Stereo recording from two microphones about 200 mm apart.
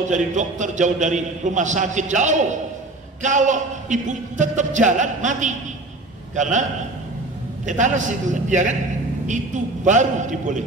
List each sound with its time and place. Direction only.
0.1 s a man's voice: 40° right (ahead or behind)
7.6 s a man's voice: 40° right (ahead or behind)